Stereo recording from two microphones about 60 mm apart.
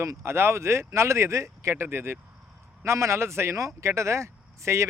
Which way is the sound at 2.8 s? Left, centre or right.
Right.